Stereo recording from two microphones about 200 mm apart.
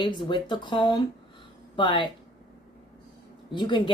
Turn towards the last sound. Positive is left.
turn(degrees=25)  # may be behind; listen again after turning